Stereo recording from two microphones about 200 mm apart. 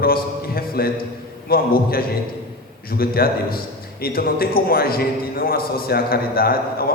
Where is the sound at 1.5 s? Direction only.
50° left (ahead or behind).